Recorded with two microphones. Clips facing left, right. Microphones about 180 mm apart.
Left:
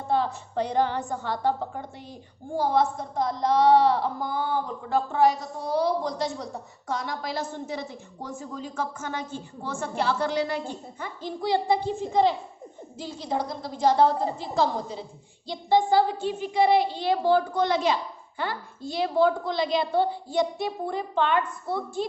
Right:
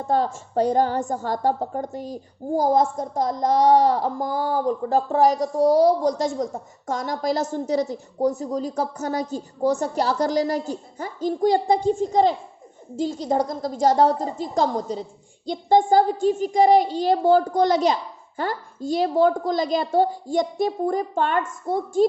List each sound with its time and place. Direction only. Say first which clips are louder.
0.1 s a woman's voice: right 3 dB; 45° right (ahead or behind)